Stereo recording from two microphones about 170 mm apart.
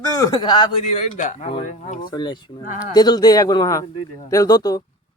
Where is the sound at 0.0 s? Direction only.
20° left (ahead or behind).